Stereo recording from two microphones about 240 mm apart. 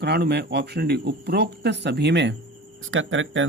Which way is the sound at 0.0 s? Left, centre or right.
Right.